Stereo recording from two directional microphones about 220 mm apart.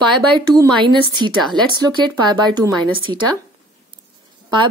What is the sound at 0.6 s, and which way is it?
Speech, 20° right (ahead or behind).